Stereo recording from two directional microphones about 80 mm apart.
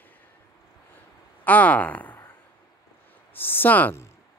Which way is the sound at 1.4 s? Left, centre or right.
Left.